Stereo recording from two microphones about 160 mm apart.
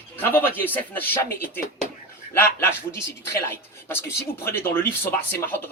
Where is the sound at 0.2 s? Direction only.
10° left (ahead or behind).